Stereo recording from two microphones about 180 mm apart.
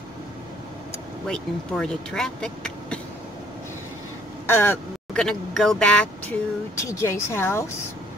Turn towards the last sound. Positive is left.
turn(degrees=15)  # may be behind; listen again after turning